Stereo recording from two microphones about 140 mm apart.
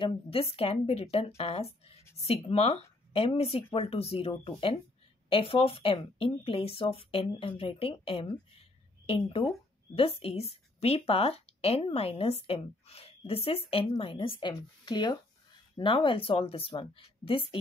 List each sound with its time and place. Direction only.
0.0 s a woman's voice: 40° left (ahead or behind)